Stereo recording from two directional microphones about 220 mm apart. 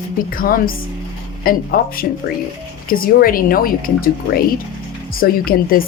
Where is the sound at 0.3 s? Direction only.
40° left (ahead or behind).